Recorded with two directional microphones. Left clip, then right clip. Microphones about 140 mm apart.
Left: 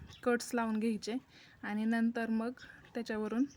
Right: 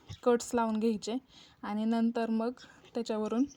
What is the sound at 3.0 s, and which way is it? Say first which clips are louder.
Speech: right 4 dB; 10° right (ahead or behind).